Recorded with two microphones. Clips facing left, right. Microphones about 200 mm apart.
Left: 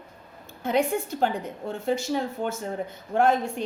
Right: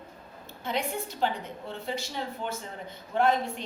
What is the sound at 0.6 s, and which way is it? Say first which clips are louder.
A woman's voice: left 8 dB; 45° left (ahead or behind).